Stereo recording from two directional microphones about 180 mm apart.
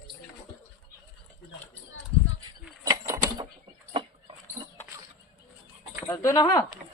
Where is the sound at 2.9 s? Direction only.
20° right (ahead or behind).